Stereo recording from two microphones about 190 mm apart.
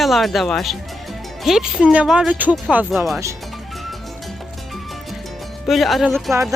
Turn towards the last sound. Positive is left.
turn(degrees=0)  # may be behind; listen again after turning